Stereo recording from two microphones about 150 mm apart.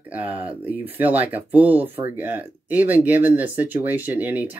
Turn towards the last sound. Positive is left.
turn(degrees=-10)  # may be behind; listen again after turning